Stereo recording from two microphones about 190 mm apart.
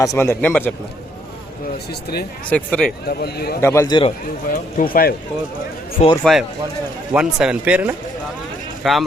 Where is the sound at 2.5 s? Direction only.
5° left (ahead or behind).